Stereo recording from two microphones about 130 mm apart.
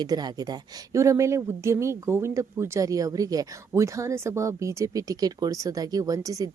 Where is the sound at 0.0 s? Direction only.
30° right (ahead or behind).